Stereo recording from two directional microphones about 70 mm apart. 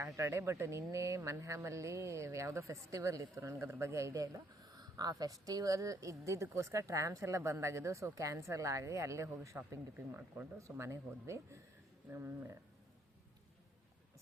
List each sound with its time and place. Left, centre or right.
0.0 s speech: right
9.7 s speech: right
10.6 s speech: right